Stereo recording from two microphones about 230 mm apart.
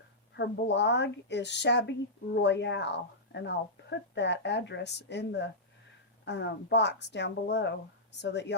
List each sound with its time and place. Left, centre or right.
0.3 s a woman's voice: left